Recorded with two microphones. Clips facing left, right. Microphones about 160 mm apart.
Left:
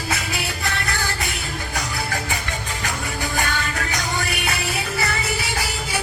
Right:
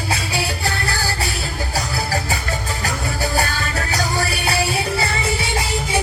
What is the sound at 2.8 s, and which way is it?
Music, 35° right (ahead or behind).